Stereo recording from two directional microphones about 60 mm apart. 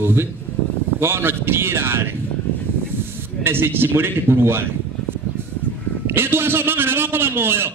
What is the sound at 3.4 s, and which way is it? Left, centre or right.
A man's voice, right.